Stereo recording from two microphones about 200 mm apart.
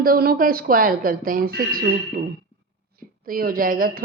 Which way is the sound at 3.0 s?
45° right (ahead or behind).